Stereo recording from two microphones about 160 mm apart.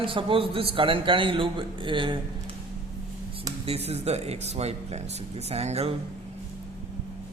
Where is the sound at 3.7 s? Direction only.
40° right (ahead or behind).